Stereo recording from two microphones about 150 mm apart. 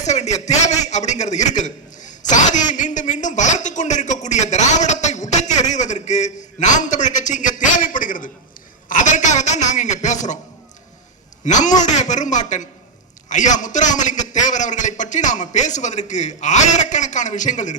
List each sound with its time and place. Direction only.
0.0 s a sound: 50° left (ahead or behind)
8.9 s a man's voice: 55° left (ahead or behind)
11.4 s a man's voice: 55° left (ahead or behind)